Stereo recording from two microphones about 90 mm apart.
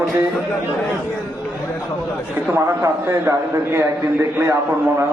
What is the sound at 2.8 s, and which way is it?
A man's voice, 30° right (ahead or behind).